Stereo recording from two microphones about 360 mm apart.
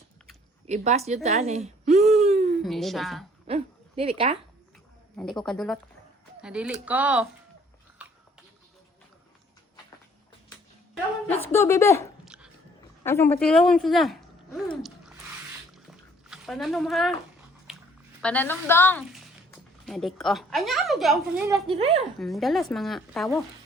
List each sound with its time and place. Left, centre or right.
0.7 s speech: centre
2.5 s a woman's voice: centre
3.4 s speech: centre
5.1 s a woman's voice: centre
8.0 s a sound: centre
11.3 s speech: centre
16.3 s speech: centre
18.2 s a woman's voice: centre
22.2 s a woman's voice: centre